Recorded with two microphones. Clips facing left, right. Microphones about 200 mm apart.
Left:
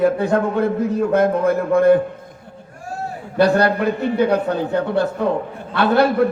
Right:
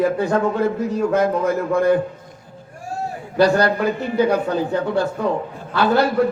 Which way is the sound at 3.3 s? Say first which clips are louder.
Left 1 dB; 60° left (ahead or behind).